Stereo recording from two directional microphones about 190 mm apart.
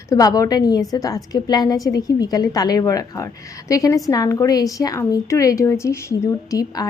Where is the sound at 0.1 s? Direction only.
20° left (ahead or behind).